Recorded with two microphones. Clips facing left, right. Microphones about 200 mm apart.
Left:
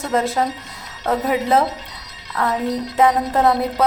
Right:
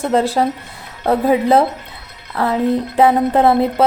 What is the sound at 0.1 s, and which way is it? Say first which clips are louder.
A woman's voice: right 3 dB; 30° right (ahead or behind).